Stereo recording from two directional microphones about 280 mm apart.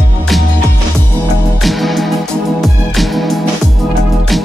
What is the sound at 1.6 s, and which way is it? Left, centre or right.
Music, centre.